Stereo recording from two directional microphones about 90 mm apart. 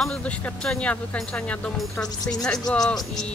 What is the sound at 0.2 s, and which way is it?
Speech, 15° left (ahead or behind).